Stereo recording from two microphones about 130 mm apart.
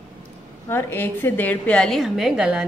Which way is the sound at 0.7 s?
15° left (ahead or behind).